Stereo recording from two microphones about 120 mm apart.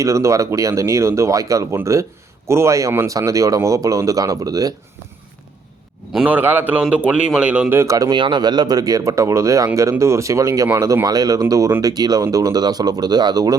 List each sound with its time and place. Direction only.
0.0 s speech: 25° right (ahead or behind)
6.1 s speech: 15° right (ahead or behind)
7.8 s speech: 25° right (ahead or behind)
8.1 s speech: 40° right (ahead or behind)